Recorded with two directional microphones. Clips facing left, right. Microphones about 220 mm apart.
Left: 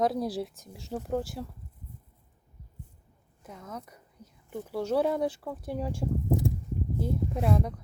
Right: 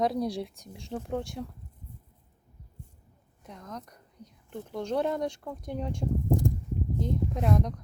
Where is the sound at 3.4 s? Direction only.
5° left (ahead or behind).